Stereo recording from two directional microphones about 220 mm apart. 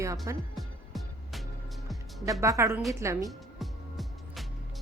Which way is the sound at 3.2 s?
Centre (ahead or behind).